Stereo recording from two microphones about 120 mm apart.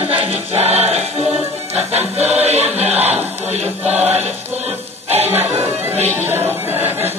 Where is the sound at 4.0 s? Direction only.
60° right (ahead or behind).